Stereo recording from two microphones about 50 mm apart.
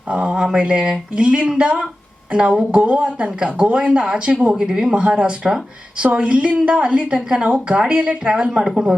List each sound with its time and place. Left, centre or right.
0.1 s a woman's voice: right